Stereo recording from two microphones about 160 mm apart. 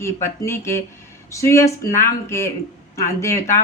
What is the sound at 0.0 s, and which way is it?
Speech, 15° left (ahead or behind).